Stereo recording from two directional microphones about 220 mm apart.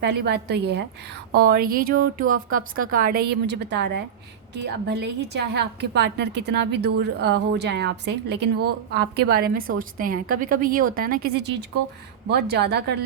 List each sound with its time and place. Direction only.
0.0 s a woman's voice: 50° right (ahead or behind)